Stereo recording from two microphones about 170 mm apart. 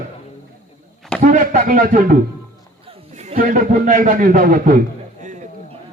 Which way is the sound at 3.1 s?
40° right (ahead or behind).